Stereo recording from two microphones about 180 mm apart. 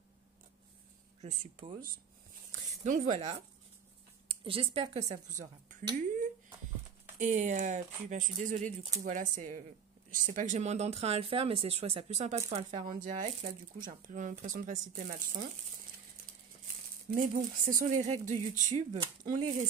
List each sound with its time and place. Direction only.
2.6 s speech: 40° right (ahead or behind)
7.2 s speech: 45° right (ahead or behind)
17.1 s speech: 50° right (ahead or behind)